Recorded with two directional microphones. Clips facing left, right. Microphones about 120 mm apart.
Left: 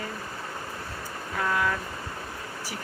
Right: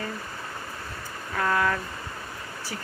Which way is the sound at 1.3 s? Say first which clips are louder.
Right 2 dB; 10° left (ahead or behind).